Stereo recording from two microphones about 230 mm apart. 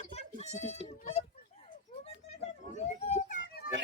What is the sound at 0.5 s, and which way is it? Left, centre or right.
Speech, left.